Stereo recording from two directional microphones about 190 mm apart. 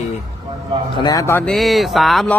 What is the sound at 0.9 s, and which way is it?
Speech, 20° left (ahead or behind).